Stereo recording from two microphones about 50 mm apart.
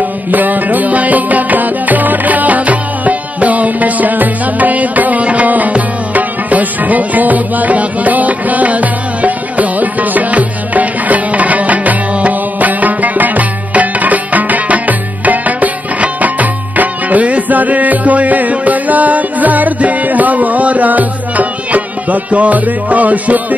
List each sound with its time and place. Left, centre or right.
0.3 s music: right